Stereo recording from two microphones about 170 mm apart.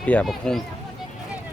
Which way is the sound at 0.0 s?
5° left (ahead or behind).